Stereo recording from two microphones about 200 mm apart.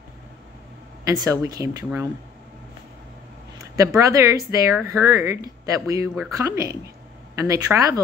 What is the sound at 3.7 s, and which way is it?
Speech, 15° right (ahead or behind).